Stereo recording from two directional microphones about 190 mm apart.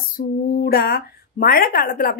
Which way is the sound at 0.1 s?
55° left (ahead or behind).